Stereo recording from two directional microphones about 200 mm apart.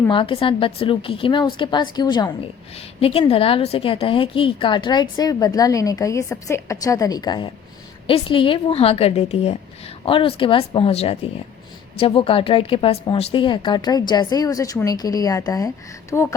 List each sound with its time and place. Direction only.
0.1 s a woman's voice: 25° left (ahead or behind)